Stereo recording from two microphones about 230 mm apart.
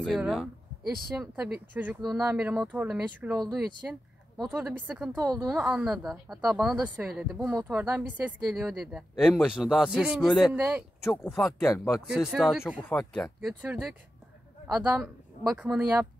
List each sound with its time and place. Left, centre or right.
0.0 s a woman's voice: centre
11.3 s speech: centre
12.3 s a woman's voice: centre